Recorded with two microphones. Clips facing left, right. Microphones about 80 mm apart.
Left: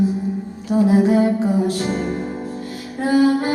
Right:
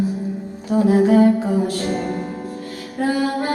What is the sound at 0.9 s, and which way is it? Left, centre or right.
Music, left.